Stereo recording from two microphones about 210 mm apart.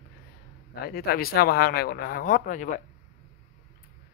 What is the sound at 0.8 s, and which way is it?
Speech, 45° left (ahead or behind).